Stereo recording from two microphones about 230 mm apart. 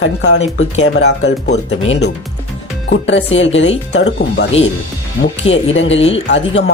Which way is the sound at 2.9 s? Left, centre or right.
Left.